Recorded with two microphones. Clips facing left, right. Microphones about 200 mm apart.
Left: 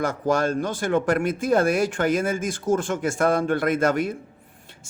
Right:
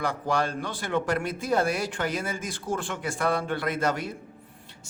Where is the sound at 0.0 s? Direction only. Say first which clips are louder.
Left 5 dB; 45° left (ahead or behind).